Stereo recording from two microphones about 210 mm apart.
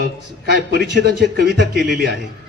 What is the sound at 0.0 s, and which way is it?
A man's voice, 50° right (ahead or behind).